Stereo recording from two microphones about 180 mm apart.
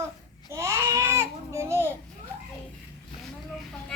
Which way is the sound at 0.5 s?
15° right (ahead or behind).